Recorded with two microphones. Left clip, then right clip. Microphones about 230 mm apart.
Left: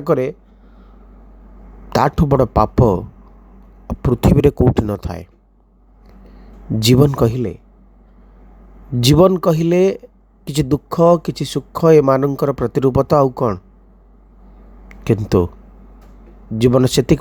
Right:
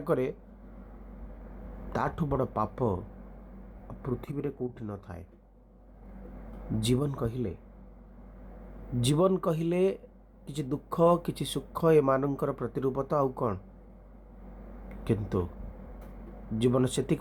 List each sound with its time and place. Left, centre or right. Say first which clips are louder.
0.0 s speech: left 12 dB; left
1.9 s speech: left 16 dB; left
6.7 s speech: left 17 dB; left
9.0 s speech: left 14 dB; left
14.8 s a sound: left 14 dB; left
16.6 s speech: left 14 dB; left